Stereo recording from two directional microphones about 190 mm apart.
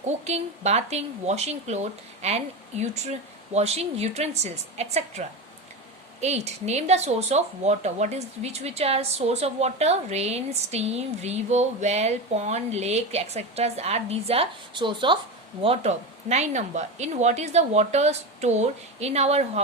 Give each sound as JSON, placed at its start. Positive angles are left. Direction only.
{"t": 0.0, "sound": "speech", "side_deg": -35}